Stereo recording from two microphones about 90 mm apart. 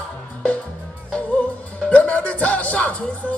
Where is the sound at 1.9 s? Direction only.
15° left (ahead or behind).